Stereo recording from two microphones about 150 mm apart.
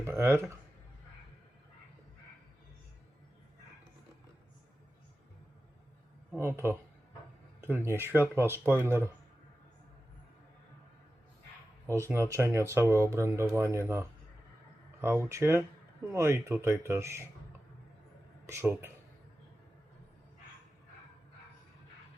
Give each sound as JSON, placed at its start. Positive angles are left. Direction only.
{"t": 0.0, "sound": "speech", "side_deg": -15}
{"t": 6.3, "sound": "speech", "side_deg": -15}
{"t": 11.9, "sound": "speech", "side_deg": -20}
{"t": 18.4, "sound": "speech", "side_deg": -15}